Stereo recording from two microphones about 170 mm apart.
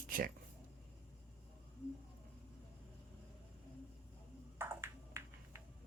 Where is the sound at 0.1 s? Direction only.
55° right (ahead or behind).